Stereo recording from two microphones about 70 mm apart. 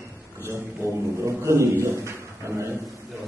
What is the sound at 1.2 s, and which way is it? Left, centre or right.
Speech, right.